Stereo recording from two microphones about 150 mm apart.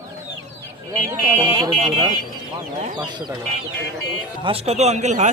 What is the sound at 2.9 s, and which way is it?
Speech, 25° right (ahead or behind).